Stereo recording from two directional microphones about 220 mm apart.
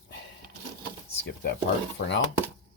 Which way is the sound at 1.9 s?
50° left (ahead or behind).